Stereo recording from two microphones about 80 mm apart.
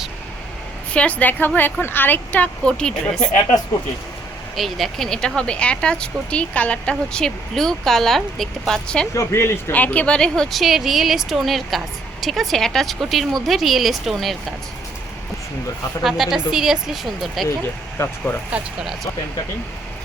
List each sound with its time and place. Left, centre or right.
0.9 s a woman's voice: centre
4.5 s speech: centre
9.1 s speech: left
9.7 s speech: centre
16.0 s speech: centre
17.9 s speech: left
18.5 s speech: centre